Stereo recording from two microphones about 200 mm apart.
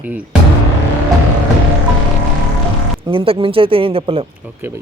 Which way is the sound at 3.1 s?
25° right (ahead or behind).